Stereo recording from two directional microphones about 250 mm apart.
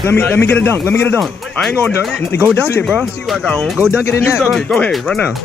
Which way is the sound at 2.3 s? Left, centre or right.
Left.